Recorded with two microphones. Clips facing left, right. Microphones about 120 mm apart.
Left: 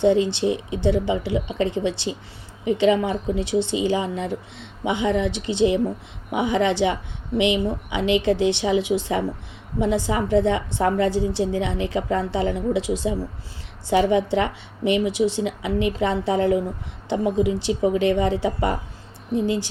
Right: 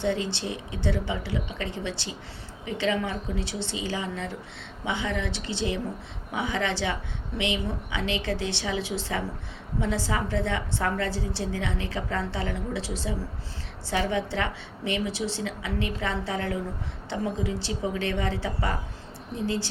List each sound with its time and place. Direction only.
0.0 s a woman's voice: 20° left (ahead or behind)